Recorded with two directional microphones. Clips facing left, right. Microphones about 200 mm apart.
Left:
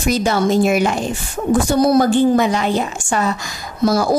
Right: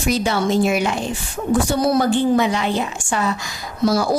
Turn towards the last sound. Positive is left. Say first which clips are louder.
# left 2 dB
turn(degrees=45)  # may be behind; listen again after turning